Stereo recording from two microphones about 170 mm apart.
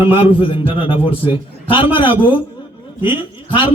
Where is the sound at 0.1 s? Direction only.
30° left (ahead or behind).